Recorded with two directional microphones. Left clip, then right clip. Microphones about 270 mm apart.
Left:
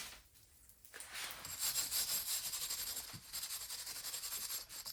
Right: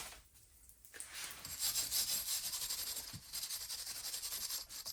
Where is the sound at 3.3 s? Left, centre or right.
Centre.